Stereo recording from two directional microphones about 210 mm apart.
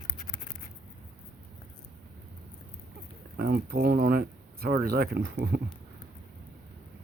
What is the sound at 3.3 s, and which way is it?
Speech, 45° right (ahead or behind).